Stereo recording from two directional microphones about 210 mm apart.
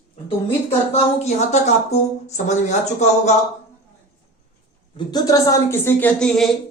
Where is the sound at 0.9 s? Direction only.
30° left (ahead or behind).